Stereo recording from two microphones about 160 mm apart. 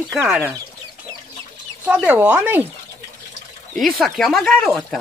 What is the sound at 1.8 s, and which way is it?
Speech, 10° right (ahead or behind).